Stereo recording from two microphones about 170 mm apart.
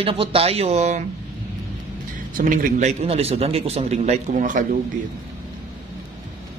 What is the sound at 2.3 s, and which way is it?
Speech, 50° right (ahead or behind).